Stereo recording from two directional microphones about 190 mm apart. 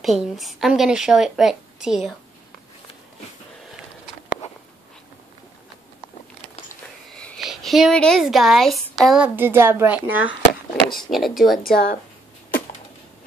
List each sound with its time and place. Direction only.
0.0 s a woman's voice: centre (ahead or behind)
7.2 s a woman's voice: centre (ahead or behind)
11.7 s speech: 50° left (ahead or behind)